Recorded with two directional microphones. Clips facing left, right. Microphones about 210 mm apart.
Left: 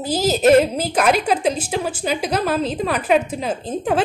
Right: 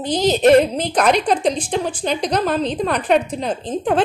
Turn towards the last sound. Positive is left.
turn(degrees=5)  # may be behind; listen again after turning